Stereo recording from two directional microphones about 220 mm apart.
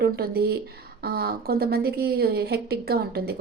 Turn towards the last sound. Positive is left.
turn(degrees=-45)  # may be behind; listen again after turning